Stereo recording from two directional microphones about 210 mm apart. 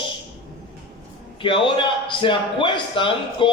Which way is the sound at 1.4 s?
25° left (ahead or behind).